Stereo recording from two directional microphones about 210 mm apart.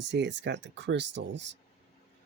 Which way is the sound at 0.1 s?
55° right (ahead or behind).